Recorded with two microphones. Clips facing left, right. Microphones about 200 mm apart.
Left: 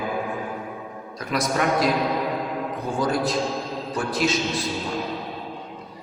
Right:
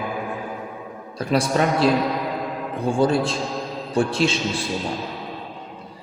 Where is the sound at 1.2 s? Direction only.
30° right (ahead or behind).